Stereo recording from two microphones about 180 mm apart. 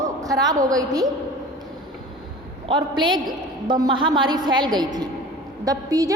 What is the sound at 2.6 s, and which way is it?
A woman's voice, 25° right (ahead or behind).